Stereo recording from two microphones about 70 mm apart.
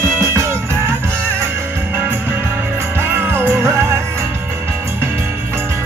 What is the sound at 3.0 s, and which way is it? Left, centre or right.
Music, right.